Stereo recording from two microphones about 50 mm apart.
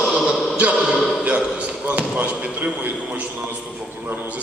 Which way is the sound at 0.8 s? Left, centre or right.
Centre.